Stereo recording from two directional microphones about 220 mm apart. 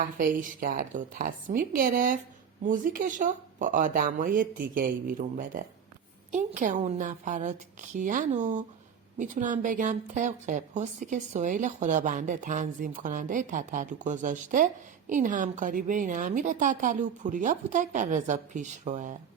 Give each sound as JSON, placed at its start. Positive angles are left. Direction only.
{"t": 0.0, "sound": "a woman's voice", "side_deg": -40}